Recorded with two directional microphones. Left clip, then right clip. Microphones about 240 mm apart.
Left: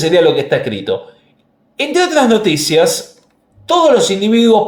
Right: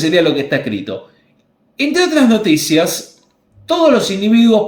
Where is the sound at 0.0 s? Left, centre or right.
Left.